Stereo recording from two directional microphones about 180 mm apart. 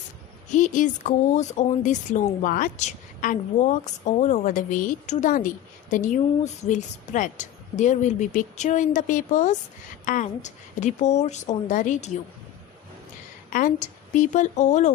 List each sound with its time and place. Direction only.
0.5 s a woman's voice: 45° left (ahead or behind)
13.5 s speech: 45° left (ahead or behind)